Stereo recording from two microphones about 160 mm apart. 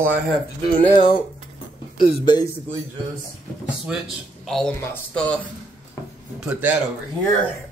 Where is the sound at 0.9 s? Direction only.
30° left (ahead or behind).